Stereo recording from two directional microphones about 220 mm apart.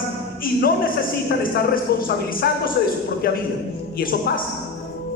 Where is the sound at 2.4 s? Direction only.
45° left (ahead or behind).